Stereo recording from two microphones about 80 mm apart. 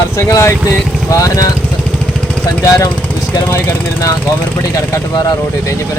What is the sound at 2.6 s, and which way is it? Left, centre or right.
Speech, left.